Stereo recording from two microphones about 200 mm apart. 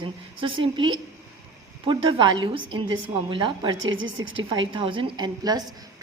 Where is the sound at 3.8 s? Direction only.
70° right (ahead or behind).